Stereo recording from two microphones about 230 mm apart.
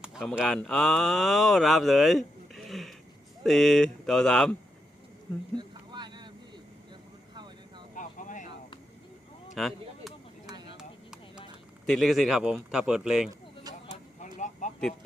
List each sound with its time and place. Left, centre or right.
0.0 s speech: centre
5.5 s vehicle: centre
7.9 s vehicle: left
9.6 s a sound: centre
11.9 s speech: centre
14.2 s a sound: left